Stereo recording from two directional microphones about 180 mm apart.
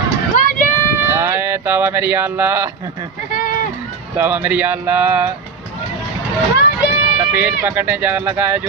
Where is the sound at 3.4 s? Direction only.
50° left (ahead or behind).